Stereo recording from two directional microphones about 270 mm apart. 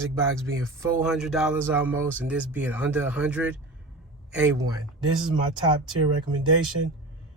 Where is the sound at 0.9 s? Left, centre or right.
Centre.